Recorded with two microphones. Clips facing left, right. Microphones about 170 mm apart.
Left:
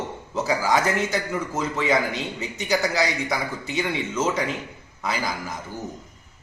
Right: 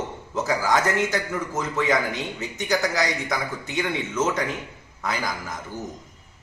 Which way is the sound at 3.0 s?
15° left (ahead or behind).